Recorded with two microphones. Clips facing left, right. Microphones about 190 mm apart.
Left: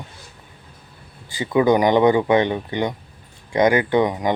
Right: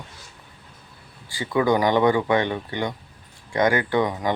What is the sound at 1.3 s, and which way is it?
Speech, 20° left (ahead or behind).